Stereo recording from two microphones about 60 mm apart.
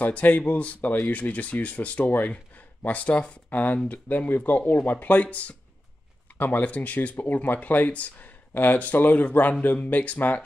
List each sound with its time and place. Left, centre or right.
0.0 s speech: left